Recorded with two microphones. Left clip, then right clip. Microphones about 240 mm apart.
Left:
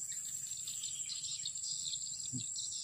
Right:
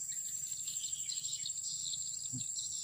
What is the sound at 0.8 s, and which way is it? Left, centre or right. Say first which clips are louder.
Cricket: right 1 dB; left.